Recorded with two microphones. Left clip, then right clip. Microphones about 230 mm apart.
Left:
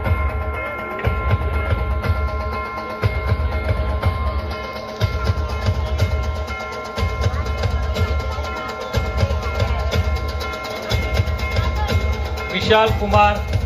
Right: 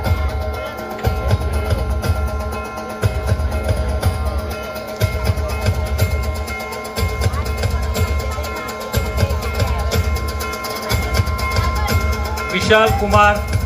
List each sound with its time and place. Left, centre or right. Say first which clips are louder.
8.9 s music: right 3 dB; right
10.9 s music: right 3 dB; right